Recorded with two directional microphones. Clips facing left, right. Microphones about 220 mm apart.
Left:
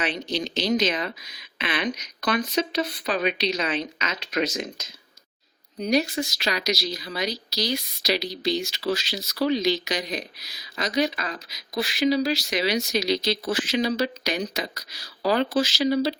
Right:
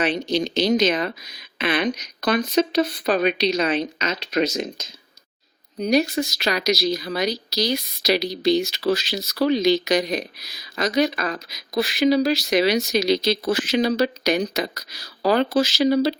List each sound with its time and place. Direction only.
0.3 s speech: 15° right (ahead or behind)
0.9 s speech: 50° right (ahead or behind)
5.9 s speech: 50° right (ahead or behind)